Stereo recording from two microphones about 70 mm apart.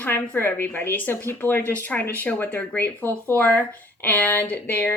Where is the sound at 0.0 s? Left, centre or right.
Left.